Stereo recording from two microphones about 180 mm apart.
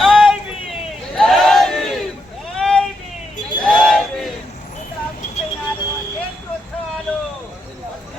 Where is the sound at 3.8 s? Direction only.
5° left (ahead or behind).